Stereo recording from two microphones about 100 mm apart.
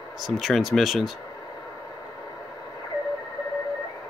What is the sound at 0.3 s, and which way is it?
Speech, centre (ahead or behind).